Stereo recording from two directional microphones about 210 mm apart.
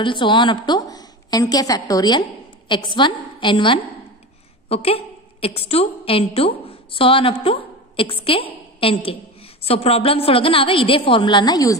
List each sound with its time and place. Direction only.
0.0 s a woman's voice: 25° left (ahead or behind)